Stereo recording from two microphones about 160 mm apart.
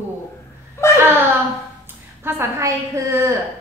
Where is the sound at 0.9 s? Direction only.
15° right (ahead or behind).